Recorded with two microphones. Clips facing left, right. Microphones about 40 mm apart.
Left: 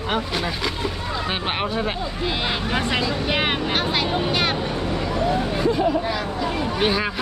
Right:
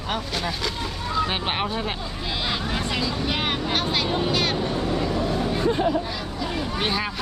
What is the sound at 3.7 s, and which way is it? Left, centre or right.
Speech, centre.